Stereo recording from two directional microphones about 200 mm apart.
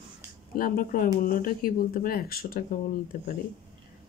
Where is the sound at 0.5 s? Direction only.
45° left (ahead or behind).